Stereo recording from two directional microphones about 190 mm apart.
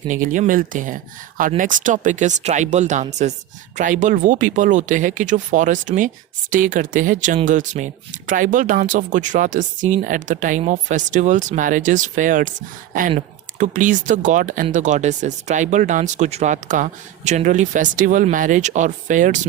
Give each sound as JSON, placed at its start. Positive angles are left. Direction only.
{"t": 0.1, "sound": "speech", "side_deg": -45}